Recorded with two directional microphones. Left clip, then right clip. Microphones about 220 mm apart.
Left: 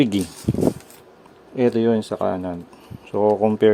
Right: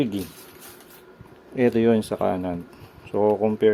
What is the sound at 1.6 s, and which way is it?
Speech, centre (ahead or behind).